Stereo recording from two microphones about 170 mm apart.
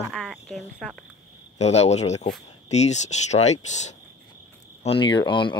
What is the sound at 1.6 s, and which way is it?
Speech, 40° left (ahead or behind).